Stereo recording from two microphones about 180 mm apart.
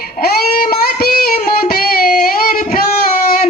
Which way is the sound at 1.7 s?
55° left (ahead or behind).